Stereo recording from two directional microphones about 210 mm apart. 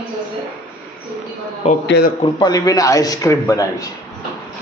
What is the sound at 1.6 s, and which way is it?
Speech, 30° left (ahead or behind).